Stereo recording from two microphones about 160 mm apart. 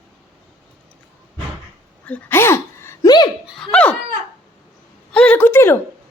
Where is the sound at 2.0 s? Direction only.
10° left (ahead or behind).